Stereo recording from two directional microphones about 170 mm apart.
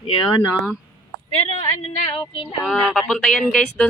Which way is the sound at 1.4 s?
40° left (ahead or behind).